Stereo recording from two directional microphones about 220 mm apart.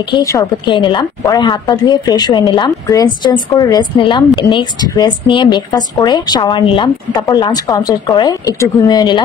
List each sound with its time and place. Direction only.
0.1 s a woman's voice: 15° left (ahead or behind)